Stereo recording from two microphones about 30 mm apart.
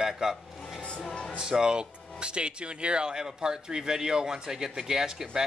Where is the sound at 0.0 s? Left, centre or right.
Right.